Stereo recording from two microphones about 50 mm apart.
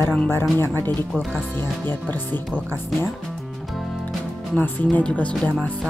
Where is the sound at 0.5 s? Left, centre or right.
Left.